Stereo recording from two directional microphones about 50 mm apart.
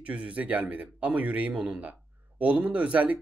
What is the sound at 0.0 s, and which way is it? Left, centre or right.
Speech, right.